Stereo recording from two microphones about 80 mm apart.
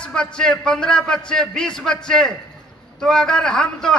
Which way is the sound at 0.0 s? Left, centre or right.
Centre.